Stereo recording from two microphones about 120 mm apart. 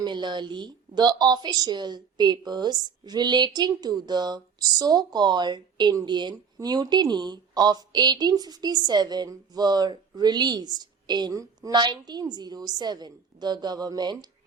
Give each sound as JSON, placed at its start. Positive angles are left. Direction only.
{"t": 0.0, "sound": "a woman's voice", "side_deg": -40}